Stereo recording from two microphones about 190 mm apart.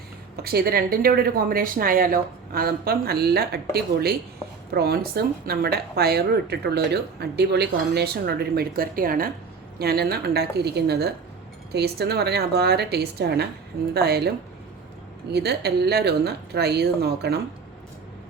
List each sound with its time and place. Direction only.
0.4 s a woman's voice: 55° right (ahead or behind)